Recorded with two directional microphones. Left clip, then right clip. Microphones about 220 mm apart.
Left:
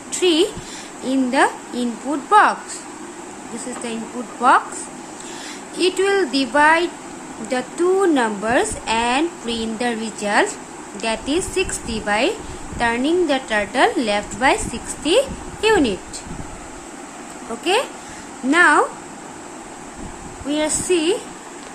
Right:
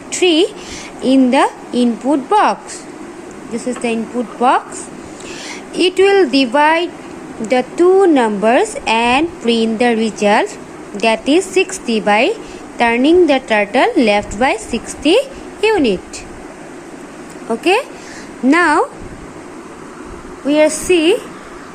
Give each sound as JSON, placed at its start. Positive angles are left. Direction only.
{"t": 0.1, "sound": "a woman's voice", "side_deg": -20}
{"t": 3.8, "sound": "speech", "side_deg": -20}
{"t": 5.7, "sound": "speech", "side_deg": -20}
{"t": 17.6, "sound": "speech", "side_deg": -25}
{"t": 20.5, "sound": "speech", "side_deg": -25}